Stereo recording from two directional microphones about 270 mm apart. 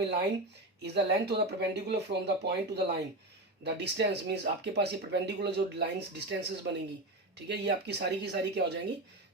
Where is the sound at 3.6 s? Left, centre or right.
Right.